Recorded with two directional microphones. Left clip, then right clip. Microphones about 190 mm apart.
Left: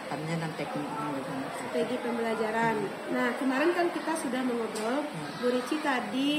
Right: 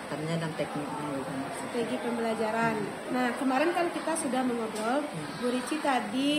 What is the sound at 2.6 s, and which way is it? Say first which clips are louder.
A woman's voice: left 1 dB; 20° right (ahead or behind).